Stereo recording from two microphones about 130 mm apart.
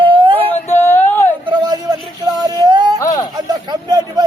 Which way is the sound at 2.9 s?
25° left (ahead or behind).